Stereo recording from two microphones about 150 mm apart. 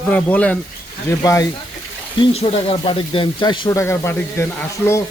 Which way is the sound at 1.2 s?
25° left (ahead or behind).